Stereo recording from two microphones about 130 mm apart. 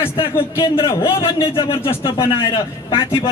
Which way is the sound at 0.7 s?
45° left (ahead or behind).